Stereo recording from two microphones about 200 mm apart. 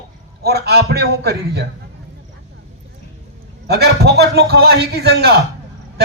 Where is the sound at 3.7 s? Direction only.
55° right (ahead or behind).